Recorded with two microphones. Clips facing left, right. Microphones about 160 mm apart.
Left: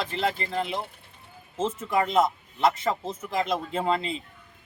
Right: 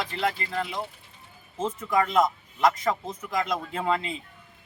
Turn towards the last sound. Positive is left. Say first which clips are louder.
# left 1 dB
turn(degrees=30)  # may be behind; listen again after turning